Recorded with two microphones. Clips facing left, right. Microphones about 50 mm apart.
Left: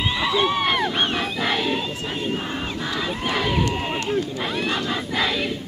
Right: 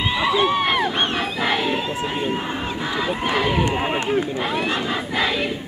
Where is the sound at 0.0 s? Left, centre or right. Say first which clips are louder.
Right 2 dB; centre.